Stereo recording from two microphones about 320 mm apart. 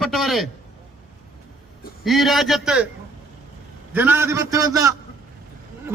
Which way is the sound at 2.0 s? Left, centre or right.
Centre.